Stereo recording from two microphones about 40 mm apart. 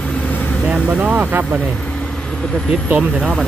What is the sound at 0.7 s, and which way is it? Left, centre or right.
Speech, right.